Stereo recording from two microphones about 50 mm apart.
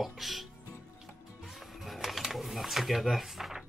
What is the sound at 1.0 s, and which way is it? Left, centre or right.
Music, centre.